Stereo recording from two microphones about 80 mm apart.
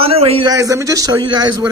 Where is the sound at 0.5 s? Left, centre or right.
Right.